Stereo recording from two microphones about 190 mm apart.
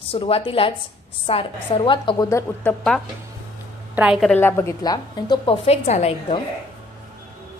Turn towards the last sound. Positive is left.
turn(degrees=35)  # may be behind; listen again after turning